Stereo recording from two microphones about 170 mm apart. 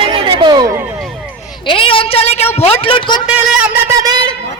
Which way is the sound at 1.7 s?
30° left (ahead or behind).